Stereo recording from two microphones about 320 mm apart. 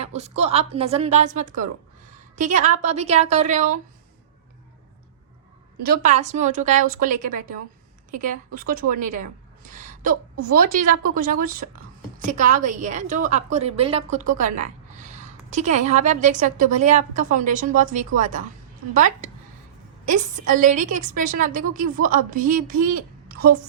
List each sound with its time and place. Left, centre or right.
0.0 s a woman's voice: centre
5.8 s a woman's voice: right
8.5 s a woman's voice: right